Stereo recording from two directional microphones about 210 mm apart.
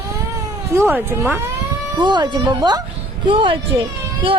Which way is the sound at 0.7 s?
10° right (ahead or behind).